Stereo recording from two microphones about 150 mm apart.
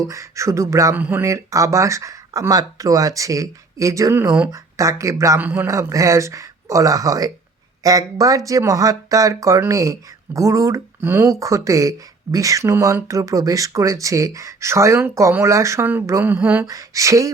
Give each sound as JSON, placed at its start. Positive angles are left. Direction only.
{"t": 0.0, "sound": "speech", "side_deg": -20}